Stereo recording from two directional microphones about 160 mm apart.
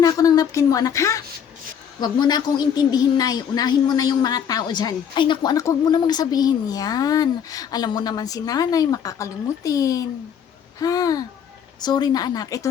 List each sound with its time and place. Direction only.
0.0 s a woman's voice: 25° left (ahead or behind)